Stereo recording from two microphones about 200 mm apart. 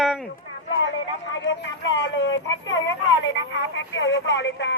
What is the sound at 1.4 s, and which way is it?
Speech, 70° left (ahead or behind).